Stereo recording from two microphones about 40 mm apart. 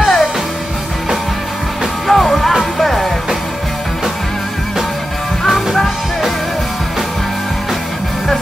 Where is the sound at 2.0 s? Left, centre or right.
Centre.